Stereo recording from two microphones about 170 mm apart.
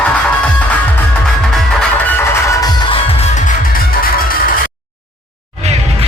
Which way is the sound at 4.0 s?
60° left (ahead or behind).